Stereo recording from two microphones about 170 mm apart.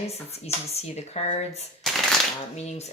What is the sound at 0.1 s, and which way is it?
Speech, 40° left (ahead or behind).